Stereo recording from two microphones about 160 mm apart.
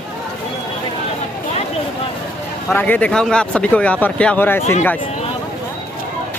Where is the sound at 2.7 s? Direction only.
10° left (ahead or behind).